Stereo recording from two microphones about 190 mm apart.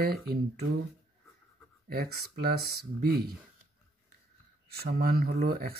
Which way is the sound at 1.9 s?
55° right (ahead or behind).